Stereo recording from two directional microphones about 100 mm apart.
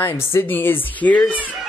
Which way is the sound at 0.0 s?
25° left (ahead or behind).